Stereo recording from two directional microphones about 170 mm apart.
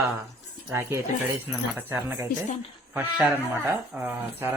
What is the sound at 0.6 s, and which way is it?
Speech, 15° right (ahead or behind).